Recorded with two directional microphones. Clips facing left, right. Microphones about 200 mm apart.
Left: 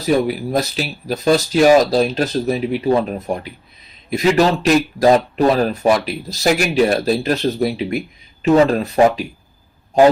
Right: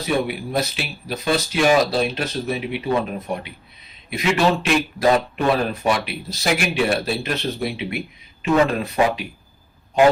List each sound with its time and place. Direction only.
0.0 s speech: 40° left (ahead or behind)